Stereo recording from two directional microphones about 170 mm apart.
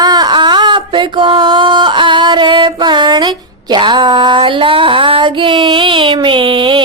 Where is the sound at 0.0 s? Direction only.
25° right (ahead or behind).